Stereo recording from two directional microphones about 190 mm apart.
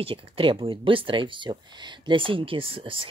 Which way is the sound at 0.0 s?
25° right (ahead or behind).